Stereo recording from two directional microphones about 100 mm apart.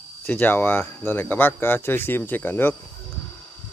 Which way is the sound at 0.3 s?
20° left (ahead or behind).